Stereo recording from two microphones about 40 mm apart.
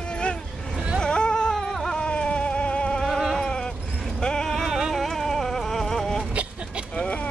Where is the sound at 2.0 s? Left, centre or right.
Left.